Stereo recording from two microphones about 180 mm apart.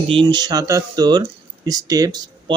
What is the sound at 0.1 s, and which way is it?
Speech, 25° right (ahead or behind).